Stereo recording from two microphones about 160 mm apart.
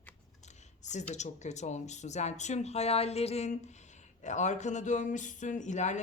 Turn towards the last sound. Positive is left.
turn(degrees=50)  # may be behind; listen again after turning